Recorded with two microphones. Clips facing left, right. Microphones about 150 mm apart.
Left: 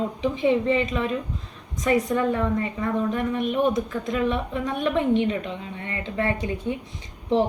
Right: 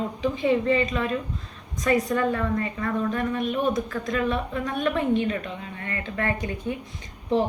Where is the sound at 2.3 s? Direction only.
15° left (ahead or behind).